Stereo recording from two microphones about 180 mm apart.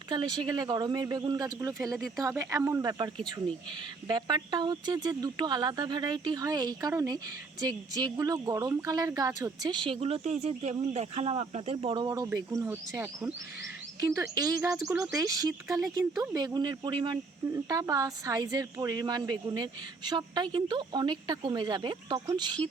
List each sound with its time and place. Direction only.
0.1 s speech: 25° right (ahead or behind)
12.0 s speech: 20° right (ahead or behind)